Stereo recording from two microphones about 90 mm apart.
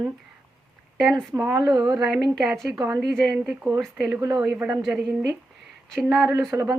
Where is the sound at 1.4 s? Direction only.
10° right (ahead or behind).